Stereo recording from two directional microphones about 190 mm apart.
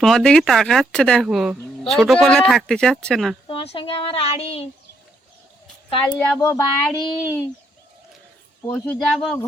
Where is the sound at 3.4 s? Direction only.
30° left (ahead or behind).